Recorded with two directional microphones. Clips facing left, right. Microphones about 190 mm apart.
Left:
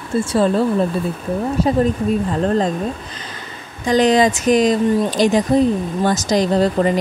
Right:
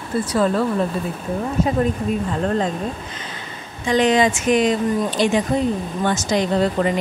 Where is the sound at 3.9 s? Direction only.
40° left (ahead or behind).